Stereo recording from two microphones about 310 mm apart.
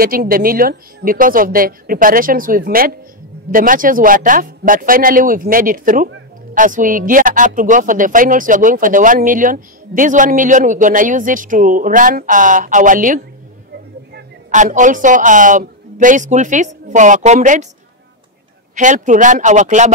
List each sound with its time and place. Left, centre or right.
0.0 s a man's voice: right
18.8 s speech: right